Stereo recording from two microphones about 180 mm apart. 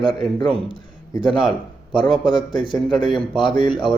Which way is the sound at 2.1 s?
Centre (ahead or behind).